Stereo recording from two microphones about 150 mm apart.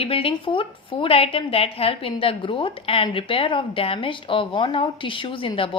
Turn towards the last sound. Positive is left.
turn(degrees=35)  # may be behind; listen again after turning